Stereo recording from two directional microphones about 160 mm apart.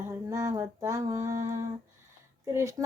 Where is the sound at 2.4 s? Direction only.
20° right (ahead or behind).